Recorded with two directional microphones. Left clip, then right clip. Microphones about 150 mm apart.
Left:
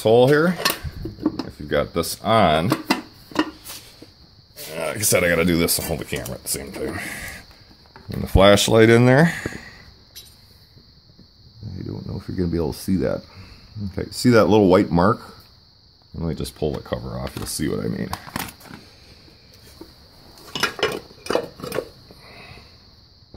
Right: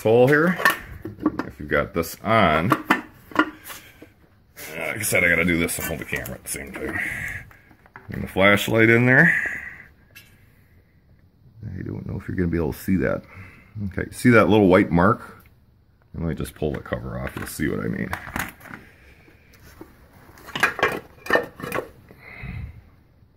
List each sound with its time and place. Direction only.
0.0 s dishes: 20° left (ahead or behind)
0.3 s speech: 10° left (ahead or behind)
4.7 s speech: 35° left (ahead or behind)
11.8 s speech: centre (ahead or behind)
20.8 s a sound: centre (ahead or behind)
22.3 s sniff: 15° left (ahead or behind)